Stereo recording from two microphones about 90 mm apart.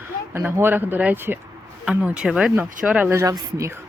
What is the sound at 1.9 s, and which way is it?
Speech, 10° right (ahead or behind).